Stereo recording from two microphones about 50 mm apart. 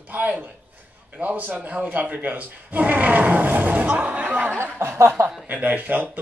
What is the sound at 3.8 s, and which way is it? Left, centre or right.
Speech, right.